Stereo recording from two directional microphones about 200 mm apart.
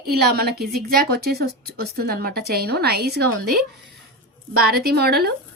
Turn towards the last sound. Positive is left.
turn(degrees=-50)  # may be behind; listen again after turning